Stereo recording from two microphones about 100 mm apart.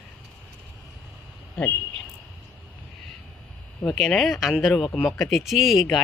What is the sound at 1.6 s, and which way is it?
Speech, 10° left (ahead or behind).